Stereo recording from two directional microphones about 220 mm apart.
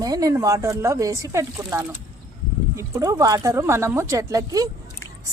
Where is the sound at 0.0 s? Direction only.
15° right (ahead or behind).